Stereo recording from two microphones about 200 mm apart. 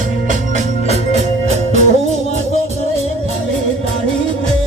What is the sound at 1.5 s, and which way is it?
Music, 35° right (ahead or behind).